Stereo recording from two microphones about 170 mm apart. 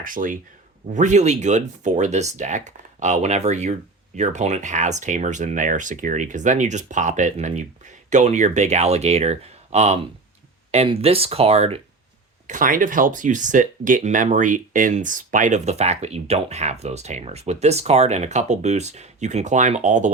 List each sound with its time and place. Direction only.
0.0 s speech: 50° right (ahead or behind); by 11.8 s 35° right (ahead or behind)
12.5 s speech: 50° right (ahead or behind)